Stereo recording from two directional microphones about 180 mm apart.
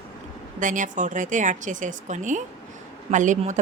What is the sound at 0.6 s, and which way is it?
Speech, 45° right (ahead or behind).